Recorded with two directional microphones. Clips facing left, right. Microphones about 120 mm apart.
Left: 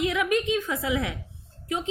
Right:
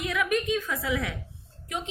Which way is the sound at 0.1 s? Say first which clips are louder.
Left 2 dB; 25° left (ahead or behind).